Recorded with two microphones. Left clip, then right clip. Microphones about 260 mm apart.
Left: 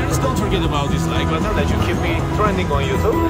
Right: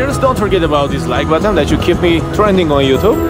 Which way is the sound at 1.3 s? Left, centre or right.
Right.